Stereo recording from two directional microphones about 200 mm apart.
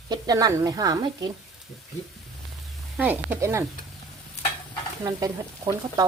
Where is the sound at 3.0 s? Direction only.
10° right (ahead or behind).